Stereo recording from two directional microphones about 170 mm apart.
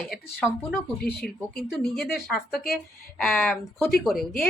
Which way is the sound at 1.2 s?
65° left (ahead or behind).